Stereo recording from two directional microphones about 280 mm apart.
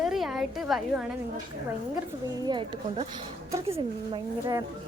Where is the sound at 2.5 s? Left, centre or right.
Centre.